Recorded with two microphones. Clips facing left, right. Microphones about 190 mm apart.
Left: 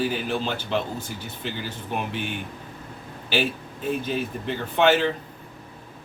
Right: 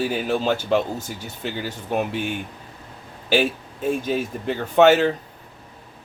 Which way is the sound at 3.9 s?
45° right (ahead or behind).